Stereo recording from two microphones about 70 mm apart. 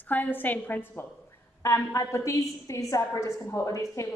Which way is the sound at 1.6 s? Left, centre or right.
Left.